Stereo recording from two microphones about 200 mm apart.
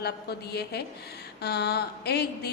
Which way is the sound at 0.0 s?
55° left (ahead or behind).